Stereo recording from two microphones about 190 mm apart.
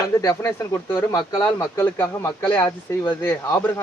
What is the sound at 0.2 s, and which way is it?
Speech, 15° left (ahead or behind).